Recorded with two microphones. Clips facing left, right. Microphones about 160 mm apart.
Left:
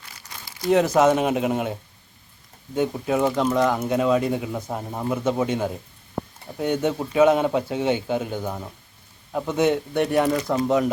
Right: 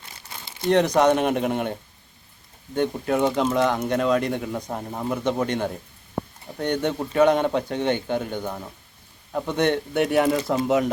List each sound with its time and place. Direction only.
0.0 s crumpling: 25° right (ahead or behind)
0.7 s speech: 5° left (ahead or behind)